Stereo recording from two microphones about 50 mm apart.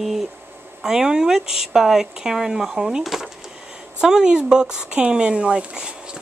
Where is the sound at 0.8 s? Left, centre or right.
Centre.